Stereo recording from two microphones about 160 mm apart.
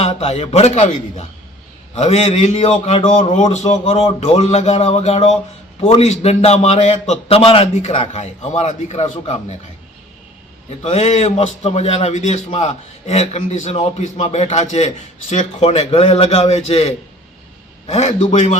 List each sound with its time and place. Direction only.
0.0 s a man's voice: 40° left (ahead or behind)
10.8 s a man's voice: 40° left (ahead or behind)